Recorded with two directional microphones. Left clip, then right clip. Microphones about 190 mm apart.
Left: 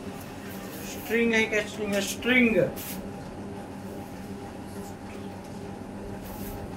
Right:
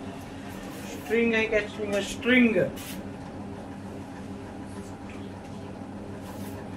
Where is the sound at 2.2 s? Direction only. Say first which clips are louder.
Right 1 dB; 20° left (ahead or behind).